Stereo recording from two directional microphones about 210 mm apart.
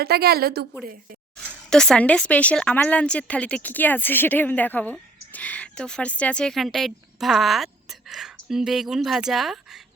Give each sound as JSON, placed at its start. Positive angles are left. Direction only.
{"t": 0.0, "sound": "a woman's voice", "side_deg": -50}
{"t": 1.7, "sound": "a woman's voice", "side_deg": 5}